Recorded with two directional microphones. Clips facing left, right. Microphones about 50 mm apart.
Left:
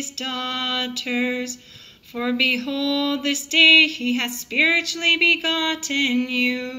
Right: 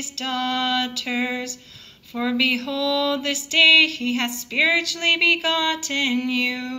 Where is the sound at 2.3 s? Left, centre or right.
Left.